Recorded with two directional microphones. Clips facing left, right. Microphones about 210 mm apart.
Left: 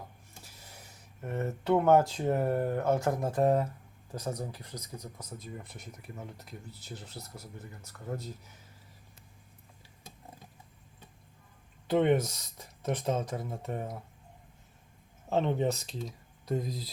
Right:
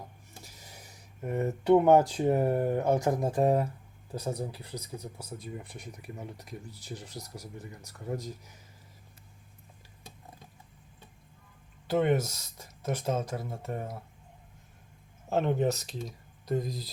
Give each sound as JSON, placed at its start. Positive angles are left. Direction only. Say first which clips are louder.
{"t": 0.4, "sound": "speech", "louder": "right 2 dB", "side_deg": -10}
{"t": 11.9, "sound": "speech", "louder": "left 1 dB", "side_deg": -5}
{"t": 13.7, "sound": "speech", "louder": "right 1 dB", "side_deg": 15}
{"t": 15.3, "sound": "speech", "louder": "right 1 dB", "side_deg": -5}